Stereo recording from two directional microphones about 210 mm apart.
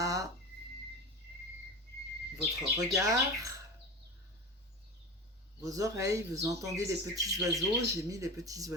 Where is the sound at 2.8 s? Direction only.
15° right (ahead or behind).